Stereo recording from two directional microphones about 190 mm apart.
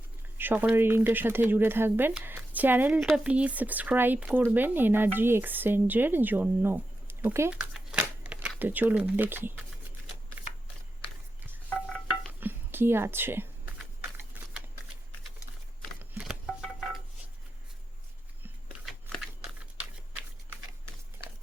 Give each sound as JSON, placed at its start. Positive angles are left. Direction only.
{"t": 0.3, "sound": "speech", "side_deg": -10}
{"t": 7.7, "sound": "shuffling cards", "side_deg": -5}
{"t": 12.3, "sound": "music", "side_deg": -10}
{"t": 18.9, "sound": "a sound", "side_deg": 0}